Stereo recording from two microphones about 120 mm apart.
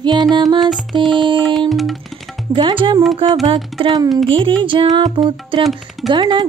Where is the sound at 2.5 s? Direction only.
45° right (ahead or behind).